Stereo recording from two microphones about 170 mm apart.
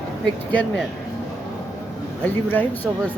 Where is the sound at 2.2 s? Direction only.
10° left (ahead or behind).